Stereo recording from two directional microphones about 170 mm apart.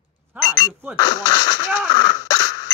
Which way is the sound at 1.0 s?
20° left (ahead or behind).